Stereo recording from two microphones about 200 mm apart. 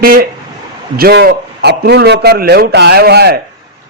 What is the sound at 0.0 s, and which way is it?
A man's voice, 45° right (ahead or behind).